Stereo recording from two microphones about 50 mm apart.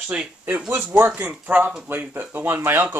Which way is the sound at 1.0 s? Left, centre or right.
Right.